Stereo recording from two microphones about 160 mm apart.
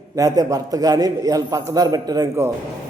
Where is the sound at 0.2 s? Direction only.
20° right (ahead or behind).